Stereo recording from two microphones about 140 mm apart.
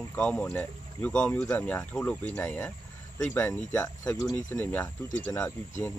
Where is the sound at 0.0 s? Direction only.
10° left (ahead or behind).